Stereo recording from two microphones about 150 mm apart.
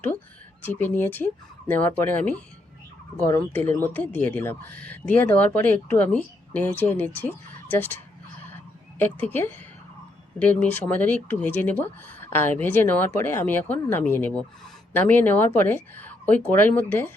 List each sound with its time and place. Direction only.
0.6 s speech: 10° left (ahead or behind)
8.4 s a sound: 15° left (ahead or behind)
10.3 s speech: 10° left (ahead or behind)